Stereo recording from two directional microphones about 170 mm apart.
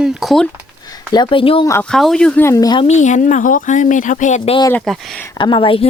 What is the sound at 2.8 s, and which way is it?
Speech, 45° left (ahead or behind).